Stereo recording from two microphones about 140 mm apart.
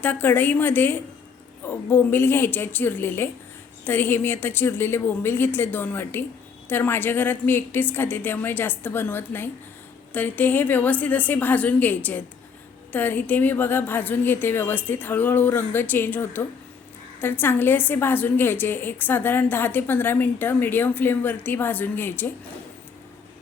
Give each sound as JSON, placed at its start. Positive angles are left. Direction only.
{"t": 0.0, "sound": "a woman's voice", "side_deg": 15}